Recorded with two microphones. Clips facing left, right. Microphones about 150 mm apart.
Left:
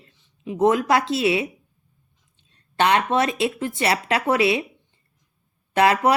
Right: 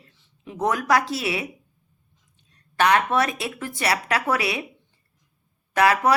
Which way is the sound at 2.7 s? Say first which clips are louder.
Left 1 dB; 25° left (ahead or behind).